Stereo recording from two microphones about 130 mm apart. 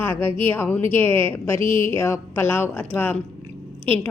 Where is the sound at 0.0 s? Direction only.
20° left (ahead or behind).